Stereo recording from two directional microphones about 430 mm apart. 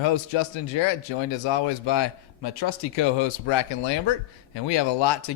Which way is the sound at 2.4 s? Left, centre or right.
Left.